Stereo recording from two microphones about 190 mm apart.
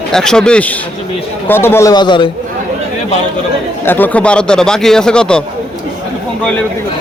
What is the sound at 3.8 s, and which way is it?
A man's voice, 10° left (ahead or behind).